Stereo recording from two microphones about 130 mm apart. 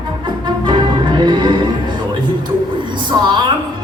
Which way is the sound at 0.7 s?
35° right (ahead or behind).